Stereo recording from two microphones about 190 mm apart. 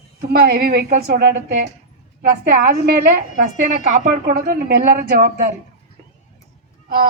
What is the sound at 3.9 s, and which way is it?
A woman's voice, 40° right (ahead or behind).